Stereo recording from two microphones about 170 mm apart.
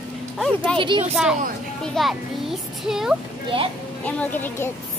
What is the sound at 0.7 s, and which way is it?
Speech, 30° right (ahead or behind).